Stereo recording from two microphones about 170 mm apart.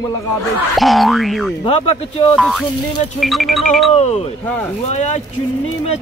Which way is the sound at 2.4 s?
Centre (ahead or behind).